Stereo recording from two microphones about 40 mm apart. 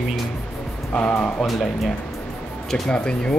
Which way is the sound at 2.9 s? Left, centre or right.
Left.